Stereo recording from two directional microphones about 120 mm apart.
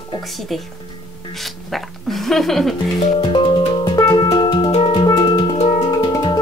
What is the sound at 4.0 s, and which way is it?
Music, 30° left (ahead or behind).